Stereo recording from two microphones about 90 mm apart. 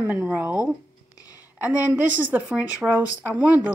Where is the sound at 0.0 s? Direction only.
20° right (ahead or behind).